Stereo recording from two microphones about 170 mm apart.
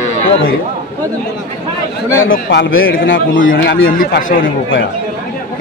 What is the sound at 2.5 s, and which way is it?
Speech, 85° left.